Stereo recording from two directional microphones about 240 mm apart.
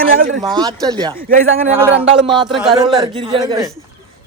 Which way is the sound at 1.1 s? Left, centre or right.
Right.